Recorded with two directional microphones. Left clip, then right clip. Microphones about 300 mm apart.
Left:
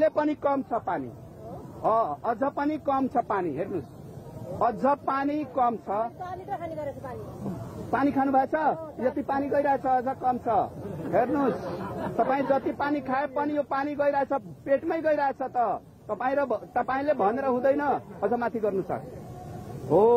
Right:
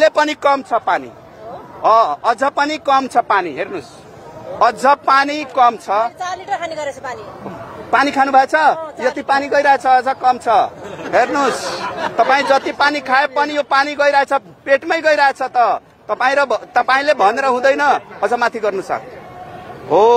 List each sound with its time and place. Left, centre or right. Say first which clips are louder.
0.0 s speech: right 11 dB; centre
1.8 s a man's voice: right 13 dB; centre
2.6 s a man's voice: right 12 dB; centre
7.9 s a man's voice: right 12 dB; centre
10.2 s a man's voice: right 12 dB; centre
12.4 s a man's voice: right 12 dB; centre